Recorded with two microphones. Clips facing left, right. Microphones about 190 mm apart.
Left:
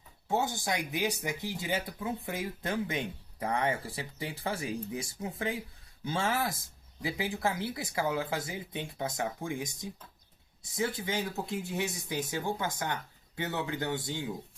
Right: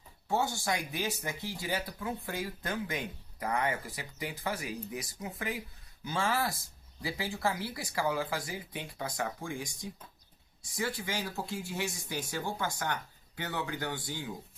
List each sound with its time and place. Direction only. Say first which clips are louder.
0.3 s speech: even; 20° left (ahead or behind)